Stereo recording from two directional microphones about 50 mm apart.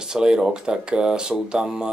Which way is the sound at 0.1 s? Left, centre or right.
Centre.